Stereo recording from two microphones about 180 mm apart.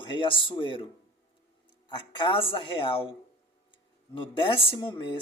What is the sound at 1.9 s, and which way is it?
Speech, 25° left (ahead or behind).